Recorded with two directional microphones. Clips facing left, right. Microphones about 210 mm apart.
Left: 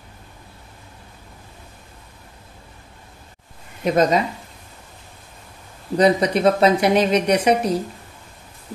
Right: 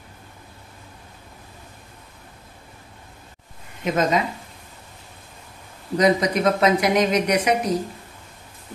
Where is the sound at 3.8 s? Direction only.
35° left (ahead or behind).